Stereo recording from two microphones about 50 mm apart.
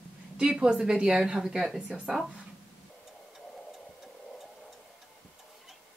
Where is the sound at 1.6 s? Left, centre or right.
Centre.